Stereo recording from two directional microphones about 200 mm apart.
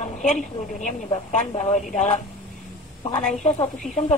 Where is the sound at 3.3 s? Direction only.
35° left (ahead or behind).